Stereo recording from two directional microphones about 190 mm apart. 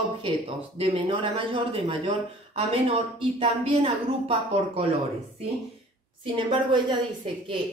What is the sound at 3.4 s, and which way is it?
A woman's voice, 30° right (ahead or behind).